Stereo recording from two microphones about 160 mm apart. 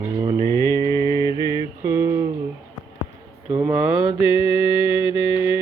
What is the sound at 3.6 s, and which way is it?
Mantra, 5° right (ahead or behind).